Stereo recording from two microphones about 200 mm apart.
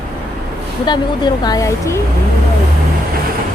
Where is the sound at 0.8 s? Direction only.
20° left (ahead or behind).